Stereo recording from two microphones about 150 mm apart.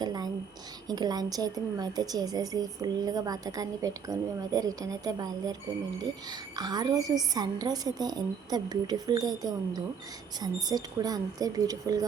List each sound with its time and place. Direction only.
0.0 s a sound: 25° right (ahead or behind)
0.9 s a woman's voice: 25° right (ahead or behind)
6.6 s a woman's voice: 25° right (ahead or behind)